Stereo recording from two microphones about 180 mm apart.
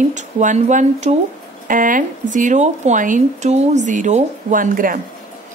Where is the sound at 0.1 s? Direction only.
40° right (ahead or behind).